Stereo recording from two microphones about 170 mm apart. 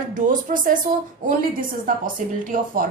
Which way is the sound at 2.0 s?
55° right (ahead or behind).